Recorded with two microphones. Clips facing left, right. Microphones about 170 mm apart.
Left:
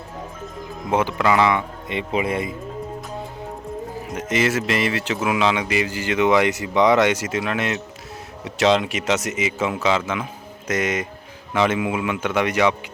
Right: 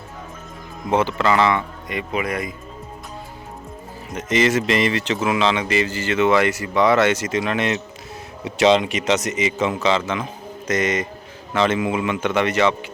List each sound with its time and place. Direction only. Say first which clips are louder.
0.9 s speech: right 1 dB; 10° left (ahead or behind)
1.9 s speech: left 2 dB; 25° left (ahead or behind)
4.1 s speech: right 3 dB; 10° left (ahead or behind)